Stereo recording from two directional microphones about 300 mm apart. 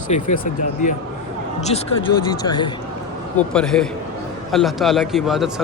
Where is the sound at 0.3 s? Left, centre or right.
Left.